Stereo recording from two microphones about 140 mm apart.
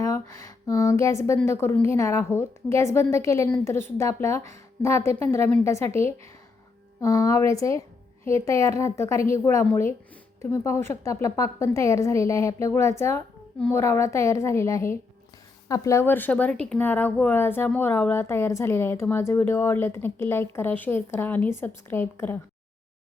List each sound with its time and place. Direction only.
0.7 s a woman's voice: 25° left (ahead or behind)